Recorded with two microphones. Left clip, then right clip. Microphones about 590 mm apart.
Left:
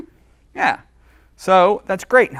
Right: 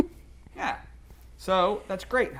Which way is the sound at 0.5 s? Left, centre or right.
Left.